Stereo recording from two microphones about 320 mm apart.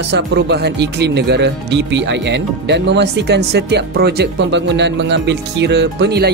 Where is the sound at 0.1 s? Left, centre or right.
Right.